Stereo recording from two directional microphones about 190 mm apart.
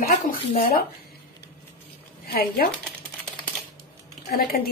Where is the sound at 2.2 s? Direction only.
55° left (ahead or behind).